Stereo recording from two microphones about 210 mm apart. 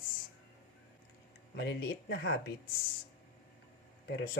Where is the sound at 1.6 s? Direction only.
50° left (ahead or behind).